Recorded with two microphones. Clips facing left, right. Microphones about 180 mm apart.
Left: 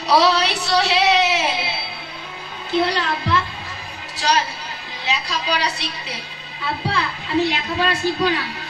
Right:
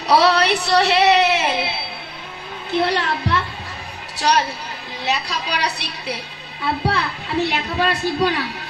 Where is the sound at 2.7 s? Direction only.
60° right (ahead or behind).